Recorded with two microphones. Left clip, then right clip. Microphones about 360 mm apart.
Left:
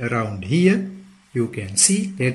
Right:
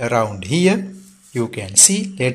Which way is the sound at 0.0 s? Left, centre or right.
Centre.